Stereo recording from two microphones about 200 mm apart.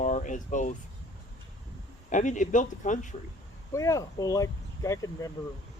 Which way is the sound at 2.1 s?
40° left (ahead or behind).